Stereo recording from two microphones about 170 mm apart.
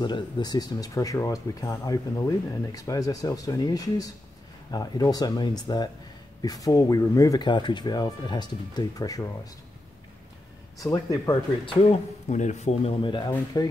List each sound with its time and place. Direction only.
0.0 s speech: 25° left (ahead or behind)
10.8 s speech: 20° left (ahead or behind)
11.6 s speech: 40° left (ahead or behind)
13.3 s speech: 20° left (ahead or behind)